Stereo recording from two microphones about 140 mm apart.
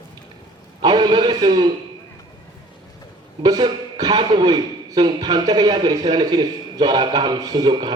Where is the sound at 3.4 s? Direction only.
30° right (ahead or behind).